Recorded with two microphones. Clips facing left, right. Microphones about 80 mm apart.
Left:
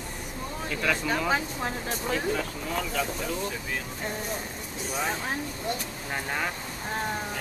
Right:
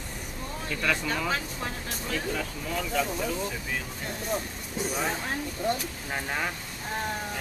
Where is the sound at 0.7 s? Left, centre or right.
Centre.